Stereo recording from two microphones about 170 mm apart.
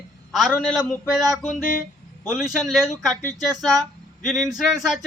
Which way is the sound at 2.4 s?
Centre (ahead or behind).